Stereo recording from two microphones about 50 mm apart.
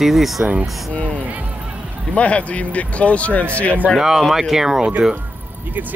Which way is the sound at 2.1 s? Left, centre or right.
Left.